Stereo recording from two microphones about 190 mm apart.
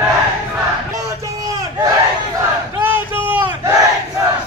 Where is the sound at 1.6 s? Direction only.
15° right (ahead or behind).